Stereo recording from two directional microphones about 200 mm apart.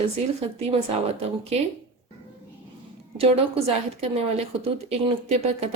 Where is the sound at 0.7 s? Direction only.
30° right (ahead or behind).